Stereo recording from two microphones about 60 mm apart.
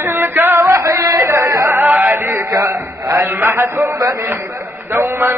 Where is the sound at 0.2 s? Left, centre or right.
Right.